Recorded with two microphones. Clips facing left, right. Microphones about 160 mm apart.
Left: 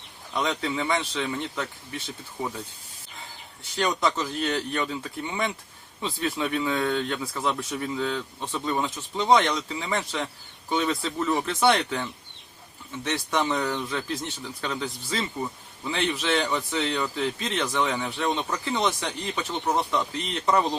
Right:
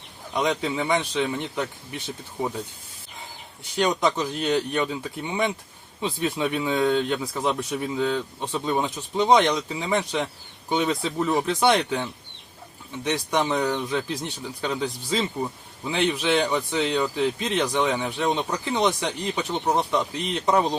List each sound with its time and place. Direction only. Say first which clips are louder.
0.3 s speech: right 3 dB; 20° right (ahead or behind)
3.6 s speech: right 3 dB; 15° right (ahead or behind)
13.1 s speech: right 2 dB; 15° right (ahead or behind)